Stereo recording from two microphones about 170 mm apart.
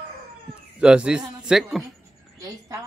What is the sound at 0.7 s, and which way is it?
Speech, 5° right (ahead or behind).